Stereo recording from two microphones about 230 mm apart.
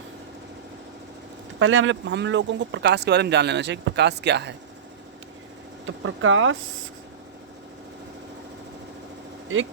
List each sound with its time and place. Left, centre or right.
1.5 s speech: right
5.8 s speech: right